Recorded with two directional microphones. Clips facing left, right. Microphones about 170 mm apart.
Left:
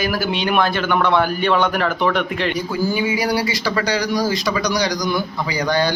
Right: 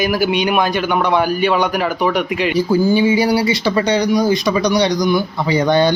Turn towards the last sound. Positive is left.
turn(degrees=-20)  # may be behind; listen again after turning